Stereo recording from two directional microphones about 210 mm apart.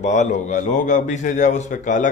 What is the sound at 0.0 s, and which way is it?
A man's voice, 35° left (ahead or behind).